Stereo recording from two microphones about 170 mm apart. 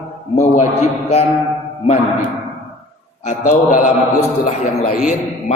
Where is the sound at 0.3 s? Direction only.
45° left (ahead or behind).